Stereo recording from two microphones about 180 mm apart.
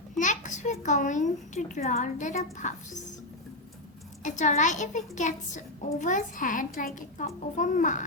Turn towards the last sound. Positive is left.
turn(degrees=45)  # may be behind; listen again after turning